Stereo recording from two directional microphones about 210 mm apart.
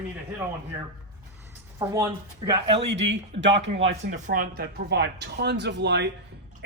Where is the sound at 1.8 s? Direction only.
15° right (ahead or behind).